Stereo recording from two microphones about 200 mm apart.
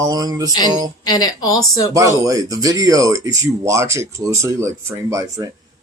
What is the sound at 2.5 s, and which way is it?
Speech, 20° right (ahead or behind).